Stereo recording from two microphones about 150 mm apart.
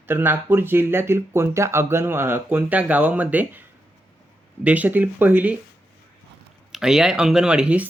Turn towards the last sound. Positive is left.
turn(degrees=-10)  # may be behind; listen again after turning